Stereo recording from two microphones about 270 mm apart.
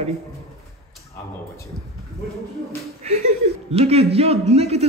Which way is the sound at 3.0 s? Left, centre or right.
Right.